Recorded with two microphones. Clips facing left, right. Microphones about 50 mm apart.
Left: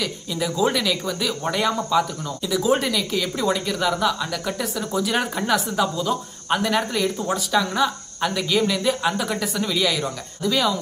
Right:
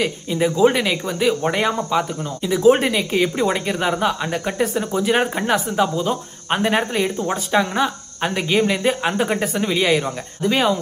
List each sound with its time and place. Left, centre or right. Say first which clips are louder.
0.0 s speech: right 6 dB; right